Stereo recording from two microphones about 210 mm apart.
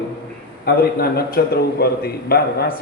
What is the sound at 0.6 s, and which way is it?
A man's voice, 45° left (ahead or behind).